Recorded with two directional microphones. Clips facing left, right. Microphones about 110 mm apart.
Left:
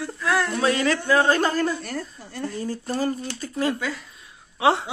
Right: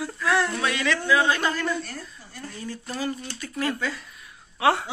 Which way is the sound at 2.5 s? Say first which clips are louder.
Left 5 dB; 35° left (ahead or behind).